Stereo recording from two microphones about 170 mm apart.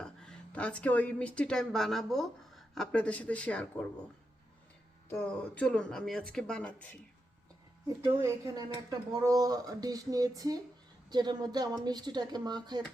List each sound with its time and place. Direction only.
0.0 s a woman's voice: 5° left (ahead or behind)
5.0 s speech: 10° left (ahead or behind)
7.9 s speech: 20° right (ahead or behind)